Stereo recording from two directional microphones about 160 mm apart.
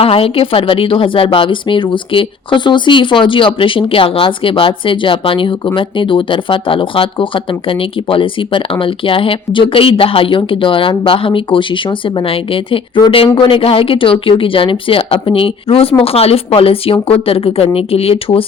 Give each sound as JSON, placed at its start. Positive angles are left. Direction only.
{"t": 0.0, "sound": "a woman's voice", "side_deg": 35}